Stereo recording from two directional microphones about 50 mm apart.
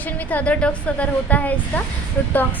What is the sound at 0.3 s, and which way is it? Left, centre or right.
A woman's voice, left.